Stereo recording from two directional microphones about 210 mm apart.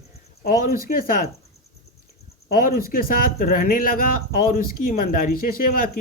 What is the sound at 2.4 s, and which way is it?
Speech, 45° left (ahead or behind).